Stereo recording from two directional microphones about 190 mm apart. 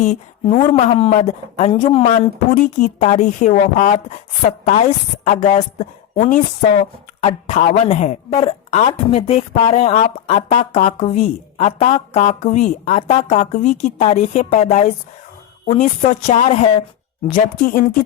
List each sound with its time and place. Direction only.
0.0 s a woman's voice: 35° left (ahead or behind)
2.0 s a woman's voice: 45° left (ahead or behind)
17.3 s speech: 45° left (ahead or behind)